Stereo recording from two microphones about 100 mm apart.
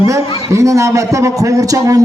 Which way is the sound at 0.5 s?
30° right (ahead or behind).